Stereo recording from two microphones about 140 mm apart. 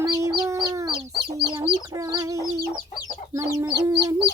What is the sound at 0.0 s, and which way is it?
Chicken, 25° right (ahead or behind).